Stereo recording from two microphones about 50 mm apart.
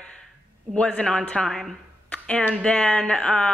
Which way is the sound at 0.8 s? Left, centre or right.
Centre.